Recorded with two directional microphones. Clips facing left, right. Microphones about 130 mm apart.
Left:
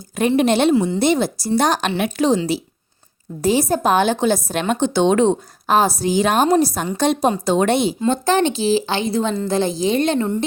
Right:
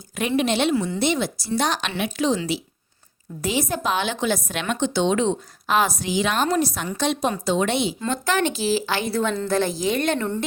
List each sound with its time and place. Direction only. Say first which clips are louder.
0.2 s speech: left 6 dB; 45° left (ahead or behind)
0.7 s a woman's voice: left 6 dB; 25° left (ahead or behind)
0.9 s speech: left 5 dB; 40° left (ahead or behind)
3.4 s a woman's voice: left 7 dB; 35° left (ahead or behind)
8.0 s a woman's voice: left 7 dB; 30° left (ahead or behind)